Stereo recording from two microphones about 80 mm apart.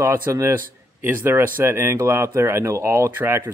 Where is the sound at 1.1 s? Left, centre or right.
Right.